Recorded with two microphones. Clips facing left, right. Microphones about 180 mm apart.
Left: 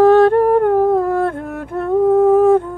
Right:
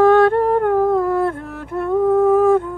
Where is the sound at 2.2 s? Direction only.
40° left (ahead or behind).